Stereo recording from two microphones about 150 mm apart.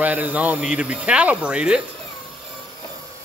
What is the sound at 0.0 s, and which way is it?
Speech, 10° right (ahead or behind).